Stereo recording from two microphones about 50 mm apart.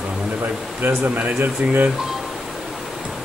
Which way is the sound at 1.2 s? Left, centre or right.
Right.